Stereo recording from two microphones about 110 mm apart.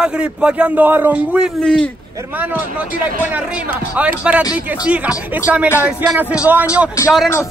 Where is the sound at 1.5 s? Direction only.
5° left (ahead or behind).